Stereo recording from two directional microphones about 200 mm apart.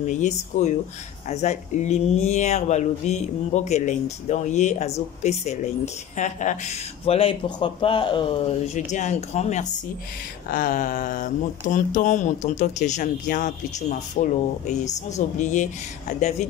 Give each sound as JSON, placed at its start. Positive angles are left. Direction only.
{"t": 0.0, "sound": "speech", "side_deg": 35}
{"t": 8.7, "sound": "speech", "side_deg": 35}